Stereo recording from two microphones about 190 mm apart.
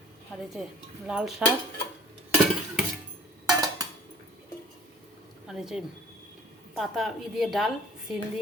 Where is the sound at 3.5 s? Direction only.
20° right (ahead or behind).